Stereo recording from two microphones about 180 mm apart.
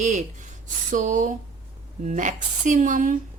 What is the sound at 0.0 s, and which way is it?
A woman's voice, 40° right (ahead or behind).